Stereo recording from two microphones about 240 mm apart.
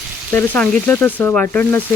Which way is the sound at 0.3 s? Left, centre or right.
Centre.